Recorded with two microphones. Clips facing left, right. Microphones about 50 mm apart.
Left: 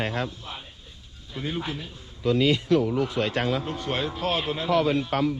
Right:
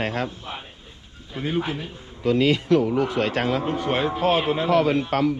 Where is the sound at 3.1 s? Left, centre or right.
Right.